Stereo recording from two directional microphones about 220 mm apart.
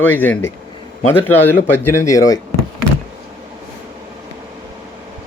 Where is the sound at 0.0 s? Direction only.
10° left (ahead or behind).